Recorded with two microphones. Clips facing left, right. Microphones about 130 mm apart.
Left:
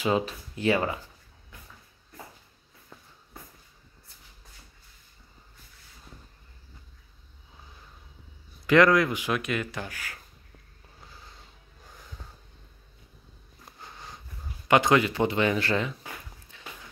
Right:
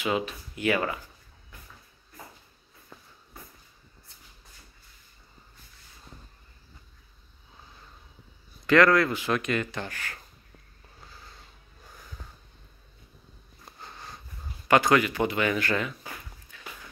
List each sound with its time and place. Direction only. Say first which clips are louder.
0.0 s speech: left 2 dB; 35° left (ahead or behind)
8.6 s speech: even; 15° left (ahead or behind)
11.0 s a sound: even; 20° left (ahead or behind)
13.7 s sniff: right 1 dB; 10° left (ahead or behind)
14.7 s speech: even; 20° left (ahead or behind)
16.5 s walk: right 1 dB; 25° left (ahead or behind)